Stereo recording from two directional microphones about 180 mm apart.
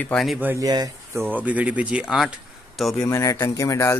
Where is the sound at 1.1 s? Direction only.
10° right (ahead or behind).